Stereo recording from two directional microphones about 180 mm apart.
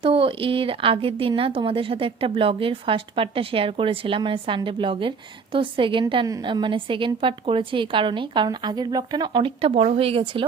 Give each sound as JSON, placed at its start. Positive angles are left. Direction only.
{"t": 0.0, "sound": "speech", "side_deg": -30}